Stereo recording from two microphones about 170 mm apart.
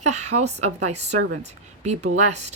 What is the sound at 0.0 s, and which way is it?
A woman's voice, 40° right (ahead or behind).